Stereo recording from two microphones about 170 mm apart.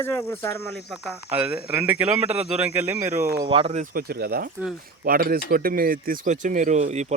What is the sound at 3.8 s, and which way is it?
A man's voice, 60° right (ahead or behind).